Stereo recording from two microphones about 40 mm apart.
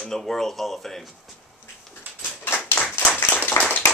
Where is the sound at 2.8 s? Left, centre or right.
Left.